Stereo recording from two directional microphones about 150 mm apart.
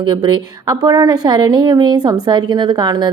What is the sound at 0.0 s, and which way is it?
A woman's voice, 30° right (ahead or behind).